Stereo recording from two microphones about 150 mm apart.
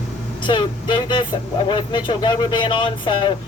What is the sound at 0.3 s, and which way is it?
Speech, 30° left (ahead or behind).